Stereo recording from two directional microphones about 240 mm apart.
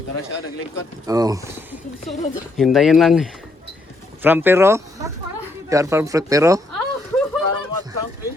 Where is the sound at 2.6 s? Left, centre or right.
Centre.